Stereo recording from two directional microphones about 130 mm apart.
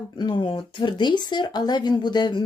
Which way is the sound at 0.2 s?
35° left (ahead or behind).